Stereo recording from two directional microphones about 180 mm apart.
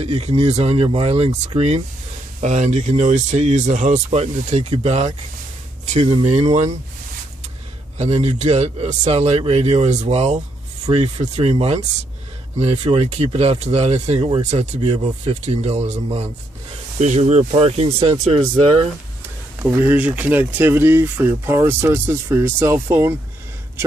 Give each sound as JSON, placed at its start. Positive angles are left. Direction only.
{"t": 0.0, "sound": "speech", "side_deg": -35}
{"t": 6.2, "sound": "speech", "side_deg": -40}
{"t": 8.0, "sound": "speech", "side_deg": -35}
{"t": 19.6, "sound": "speech", "side_deg": -10}